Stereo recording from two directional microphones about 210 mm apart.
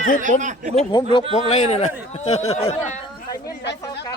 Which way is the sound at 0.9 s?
25° left (ahead or behind).